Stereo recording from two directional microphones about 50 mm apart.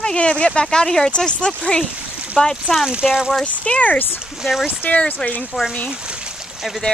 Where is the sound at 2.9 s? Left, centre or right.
Centre.